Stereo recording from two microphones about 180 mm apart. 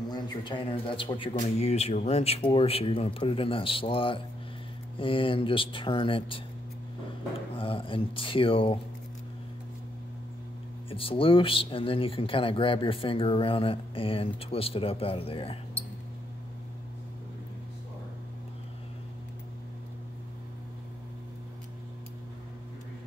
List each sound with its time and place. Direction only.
0.1 s speech: 25° left (ahead or behind)
7.5 s speech: 30° left (ahead or behind)
10.9 s speech: 30° left (ahead or behind)